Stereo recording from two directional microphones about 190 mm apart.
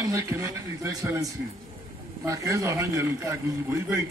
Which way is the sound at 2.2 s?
15° right (ahead or behind).